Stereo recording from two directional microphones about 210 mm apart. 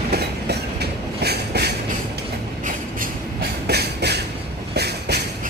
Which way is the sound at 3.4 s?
50° right (ahead or behind).